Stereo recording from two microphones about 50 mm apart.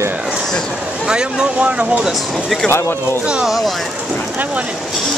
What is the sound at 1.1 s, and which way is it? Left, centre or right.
Speech, centre.